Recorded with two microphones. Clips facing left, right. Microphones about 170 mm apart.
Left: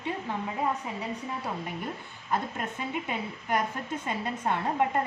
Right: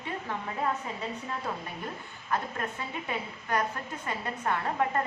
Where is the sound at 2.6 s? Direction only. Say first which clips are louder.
Left 2 dB; 20° left (ahead or behind).